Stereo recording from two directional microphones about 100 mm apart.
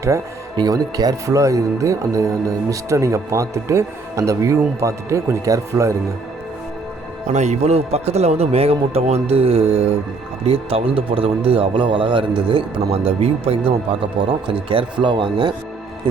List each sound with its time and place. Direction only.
0.0 s speech: 35° right (ahead or behind)
7.3 s a man's voice: 90° right
10.4 s speech: 75° right (ahead or behind); by 15.5 s 50° right (ahead or behind)